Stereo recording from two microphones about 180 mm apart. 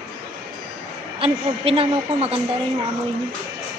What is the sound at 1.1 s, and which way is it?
A woman's voice, 30° right (ahead or behind).